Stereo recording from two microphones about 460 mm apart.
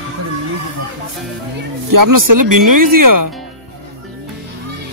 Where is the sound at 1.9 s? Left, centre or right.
Right.